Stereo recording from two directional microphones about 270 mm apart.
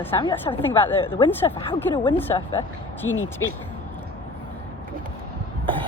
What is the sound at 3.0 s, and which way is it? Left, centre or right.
Speech, left.